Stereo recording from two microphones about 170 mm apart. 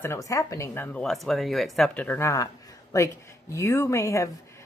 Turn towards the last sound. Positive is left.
turn(degrees=15)  # may be behind; listen again after turning